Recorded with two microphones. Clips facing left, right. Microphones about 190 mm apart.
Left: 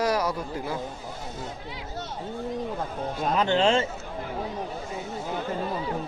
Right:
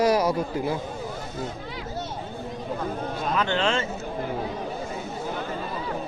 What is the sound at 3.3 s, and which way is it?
Speech, 35° left (ahead or behind).